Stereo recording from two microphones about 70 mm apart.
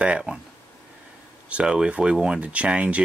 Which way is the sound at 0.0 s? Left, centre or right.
Centre.